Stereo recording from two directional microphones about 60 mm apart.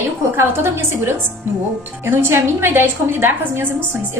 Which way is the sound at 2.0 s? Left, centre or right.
Right.